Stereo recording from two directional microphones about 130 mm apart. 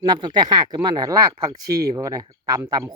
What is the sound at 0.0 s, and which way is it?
Speech, 35° right (ahead or behind).